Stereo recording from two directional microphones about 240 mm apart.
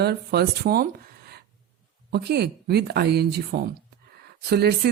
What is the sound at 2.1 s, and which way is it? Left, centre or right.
Speech, right.